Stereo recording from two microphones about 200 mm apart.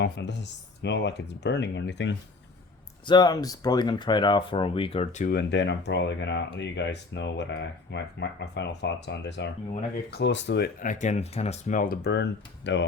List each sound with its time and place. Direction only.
0.0 s speech: 60° left (ahead or behind)
3.1 s speech: 20° left (ahead or behind)
5.3 s speech: 55° left (ahead or behind)